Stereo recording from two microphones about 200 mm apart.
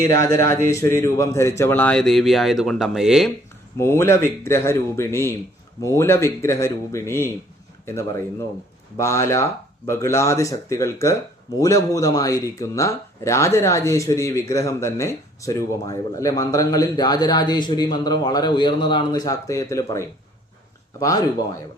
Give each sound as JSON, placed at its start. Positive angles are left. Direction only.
{"t": 0.0, "sound": "speech", "side_deg": 15}
{"t": 3.8, "sound": "speech", "side_deg": 15}